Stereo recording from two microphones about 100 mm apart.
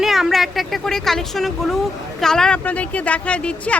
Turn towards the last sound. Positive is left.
turn(degrees=10)  # may be behind; listen again after turning